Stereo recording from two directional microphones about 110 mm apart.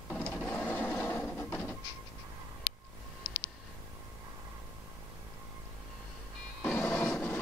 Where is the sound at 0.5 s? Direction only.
15° left (ahead or behind).